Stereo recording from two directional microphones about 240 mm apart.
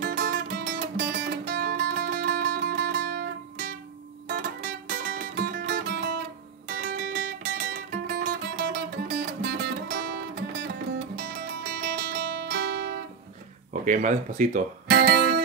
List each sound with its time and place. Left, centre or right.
0.0 s music: right
11.2 s guitar: right
13.8 s speech: right